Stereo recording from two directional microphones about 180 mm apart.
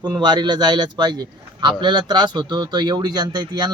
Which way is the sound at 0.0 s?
25° right (ahead or behind).